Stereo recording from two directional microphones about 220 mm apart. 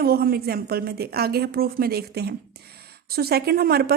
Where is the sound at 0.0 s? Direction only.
45° right (ahead or behind).